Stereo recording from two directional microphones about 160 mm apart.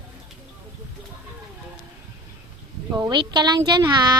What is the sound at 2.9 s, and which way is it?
Speech, 25° right (ahead or behind).